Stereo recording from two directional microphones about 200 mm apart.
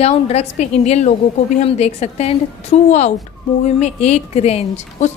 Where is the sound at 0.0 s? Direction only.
30° left (ahead or behind).